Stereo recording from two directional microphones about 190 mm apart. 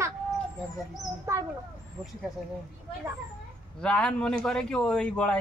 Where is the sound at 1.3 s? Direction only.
15° right (ahead or behind).